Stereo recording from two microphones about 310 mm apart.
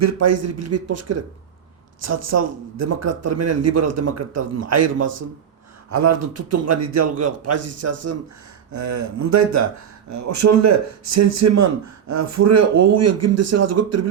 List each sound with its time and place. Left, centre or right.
0.0 s a man's voice: right
8.7 s speech: right